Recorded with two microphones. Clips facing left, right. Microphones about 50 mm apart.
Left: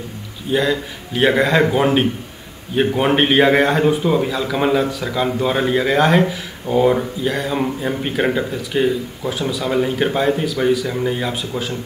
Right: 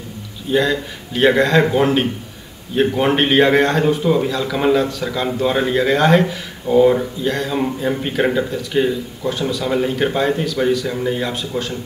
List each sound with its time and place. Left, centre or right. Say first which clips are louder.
0.5 s a man's voice: right 1 dB; centre